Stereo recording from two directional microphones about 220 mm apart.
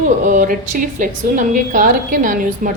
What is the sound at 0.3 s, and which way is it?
A woman's voice, 35° right (ahead or behind).